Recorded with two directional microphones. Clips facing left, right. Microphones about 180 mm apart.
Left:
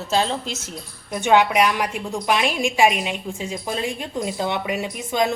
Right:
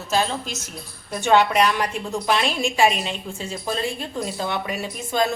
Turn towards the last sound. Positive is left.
turn(degrees=15)  # may be behind; listen again after turning